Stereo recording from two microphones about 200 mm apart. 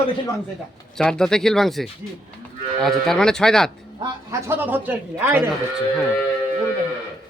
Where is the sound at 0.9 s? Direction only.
5° left (ahead or behind).